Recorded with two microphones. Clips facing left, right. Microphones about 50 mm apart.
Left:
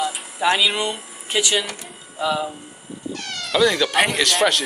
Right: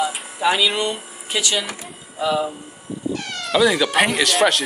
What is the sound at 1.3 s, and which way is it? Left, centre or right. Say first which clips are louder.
Speech: left 1 dB; centre.